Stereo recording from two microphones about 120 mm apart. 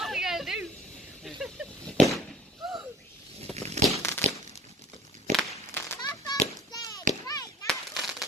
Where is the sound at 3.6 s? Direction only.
65° right (ahead or behind).